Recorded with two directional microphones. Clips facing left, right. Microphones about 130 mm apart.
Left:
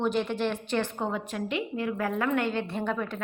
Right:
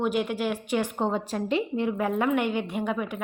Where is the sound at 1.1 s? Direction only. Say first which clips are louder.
Right 4 dB; 30° right (ahead or behind); by 3.2 s 10° right (ahead or behind).